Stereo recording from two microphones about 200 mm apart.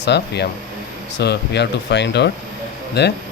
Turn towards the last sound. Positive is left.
turn(degrees=60)  # may be behind; listen again after turning